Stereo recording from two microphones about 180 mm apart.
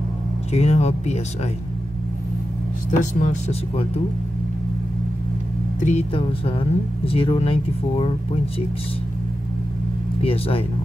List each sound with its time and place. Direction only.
0.5 s speech: 35° left (ahead or behind)
2.9 s speech: 40° left (ahead or behind)
5.8 s speech: 40° left (ahead or behind)
10.2 s speech: 30° left (ahead or behind)